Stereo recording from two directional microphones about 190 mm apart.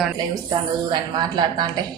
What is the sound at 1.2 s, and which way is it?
Speech, 25° right (ahead or behind).